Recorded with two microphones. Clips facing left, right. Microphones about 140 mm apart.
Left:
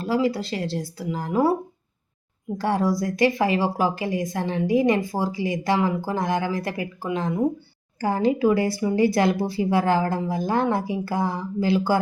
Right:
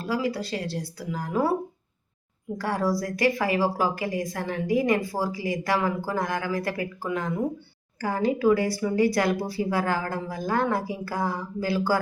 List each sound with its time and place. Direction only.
0.0 s a woman's voice: 25° left (ahead or behind)
2.6 s a woman's voice: 25° left (ahead or behind)